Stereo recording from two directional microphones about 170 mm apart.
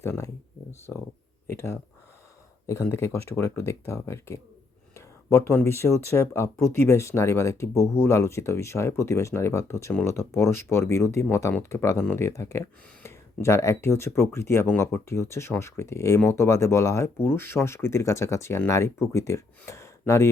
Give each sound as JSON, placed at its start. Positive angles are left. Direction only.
{"t": 0.0, "sound": "speech", "side_deg": 15}
{"t": 1.5, "sound": "a sound", "side_deg": 15}
{"t": 2.6, "sound": "speech", "side_deg": 15}